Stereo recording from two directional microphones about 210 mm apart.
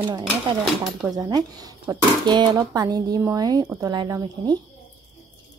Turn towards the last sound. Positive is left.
turn(degrees=-15)  # may be behind; listen again after turning